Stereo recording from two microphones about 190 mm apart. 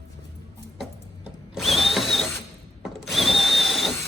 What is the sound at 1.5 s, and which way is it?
Drill, centre (ahead or behind).